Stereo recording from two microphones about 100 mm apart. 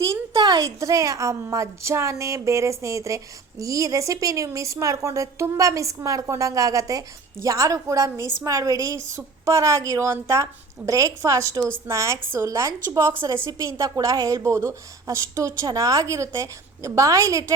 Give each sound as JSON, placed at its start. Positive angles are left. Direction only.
{"t": 0.3, "sound": "a woman's voice", "side_deg": -40}